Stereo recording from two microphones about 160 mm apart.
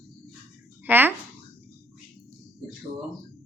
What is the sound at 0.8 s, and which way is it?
Speech, 10° right (ahead or behind).